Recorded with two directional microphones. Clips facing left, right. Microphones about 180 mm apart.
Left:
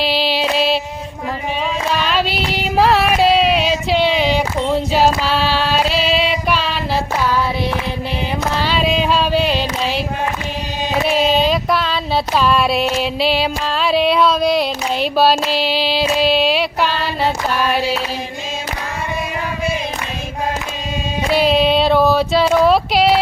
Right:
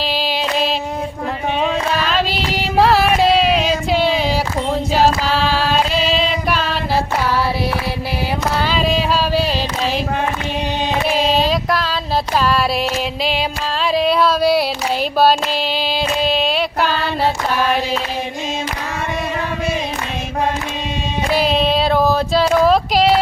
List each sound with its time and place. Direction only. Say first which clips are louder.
3.0 s a sound: even; 5° left (ahead or behind)
6.0 s female singing: left 1 dB; 5° left (ahead or behind)
8.8 s a sound: left 2 dB; 35° right (ahead or behind)
9.0 s music: left 1 dB; 5° right (ahead or behind)
11.7 s a sound: left 1 dB; centre (ahead or behind)
12.5 s female singing: left 2 dB; centre (ahead or behind)
14.0 s female singing: right 1 dB; centre (ahead or behind)
16.0 s female singing: left 3 dB; 5° left (ahead or behind)
21.4 s female singing: left 4 dB; centre (ahead or behind)